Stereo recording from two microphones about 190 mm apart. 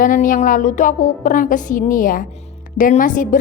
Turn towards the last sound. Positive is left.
turn(degrees=45)  # may be behind; listen again after turning